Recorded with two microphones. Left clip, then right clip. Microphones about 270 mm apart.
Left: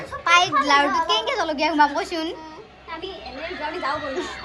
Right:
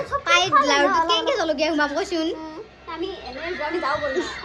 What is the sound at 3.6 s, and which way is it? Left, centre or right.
Speech, right.